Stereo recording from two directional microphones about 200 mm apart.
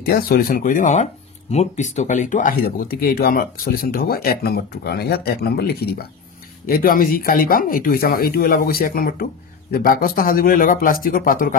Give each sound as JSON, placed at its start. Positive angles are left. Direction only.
{"t": 0.0, "sound": "speech", "side_deg": 50}